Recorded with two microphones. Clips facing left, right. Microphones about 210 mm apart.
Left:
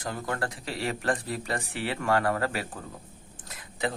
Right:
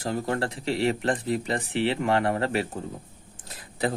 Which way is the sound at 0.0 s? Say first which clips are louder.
Right 5 dB; 30° right (ahead or behind).